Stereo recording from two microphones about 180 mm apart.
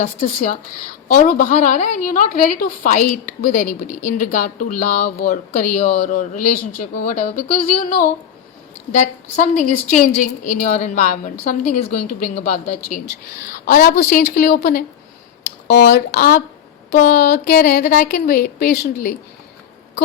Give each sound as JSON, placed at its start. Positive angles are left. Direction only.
{"t": 0.0, "sound": "a woman's voice", "side_deg": 45}